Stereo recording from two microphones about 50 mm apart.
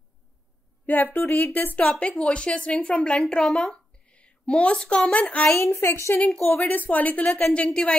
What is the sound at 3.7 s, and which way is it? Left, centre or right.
A woman's voice, left.